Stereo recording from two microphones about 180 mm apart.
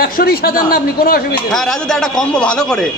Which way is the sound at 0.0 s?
55° left (ahead or behind).